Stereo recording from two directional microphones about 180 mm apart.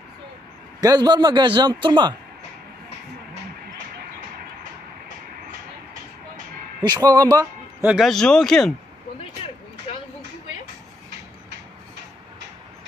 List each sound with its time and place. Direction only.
0.8 s a man's voice: 20° right (ahead or behind)
6.8 s a man's voice: 25° right (ahead or behind)
7.8 s speech: 5° right (ahead or behind)